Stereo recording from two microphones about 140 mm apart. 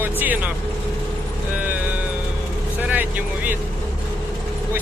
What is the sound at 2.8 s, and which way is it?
Vehicle, 10° right (ahead or behind).